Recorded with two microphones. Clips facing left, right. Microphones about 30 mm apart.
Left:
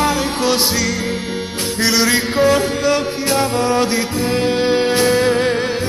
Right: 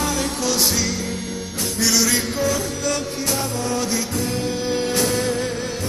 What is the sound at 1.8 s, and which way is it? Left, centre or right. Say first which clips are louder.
Music: left 4 dB; left.